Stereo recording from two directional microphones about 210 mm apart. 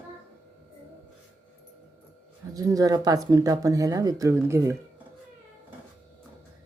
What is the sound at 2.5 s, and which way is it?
Speech, 15° right (ahead or behind).